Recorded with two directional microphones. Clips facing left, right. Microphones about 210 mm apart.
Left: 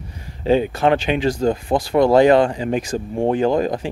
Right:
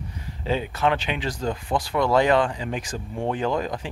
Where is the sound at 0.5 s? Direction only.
45° left (ahead or behind).